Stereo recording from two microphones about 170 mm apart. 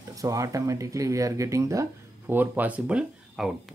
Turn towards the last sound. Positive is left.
turn(degrees=-5)  # may be behind; listen again after turning